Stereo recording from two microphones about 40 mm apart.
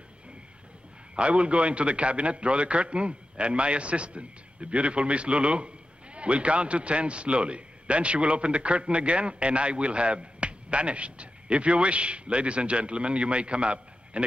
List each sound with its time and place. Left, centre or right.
1.1 s a man's voice: right